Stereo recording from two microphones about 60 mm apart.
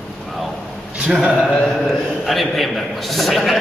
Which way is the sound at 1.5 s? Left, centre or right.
Centre.